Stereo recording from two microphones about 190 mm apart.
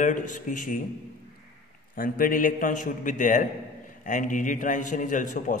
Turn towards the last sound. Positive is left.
turn(degrees=40)  # may be behind; listen again after turning